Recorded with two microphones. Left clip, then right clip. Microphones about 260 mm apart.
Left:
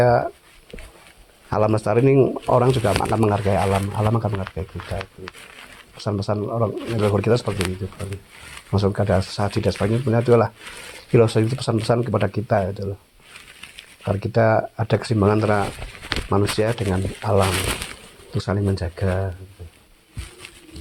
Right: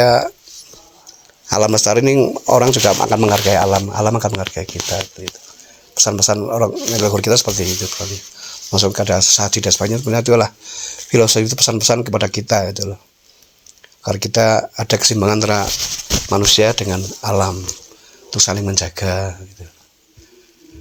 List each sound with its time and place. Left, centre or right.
0.0 s speech: right
1.5 s speech: right
14.0 s speech: right